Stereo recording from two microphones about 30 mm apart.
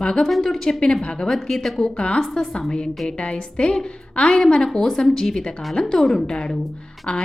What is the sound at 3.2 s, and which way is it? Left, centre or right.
Speech, left.